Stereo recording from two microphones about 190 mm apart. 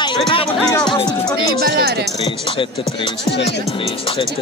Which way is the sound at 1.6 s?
55° right (ahead or behind).